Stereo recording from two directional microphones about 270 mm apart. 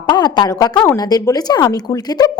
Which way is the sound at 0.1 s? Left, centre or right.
Centre.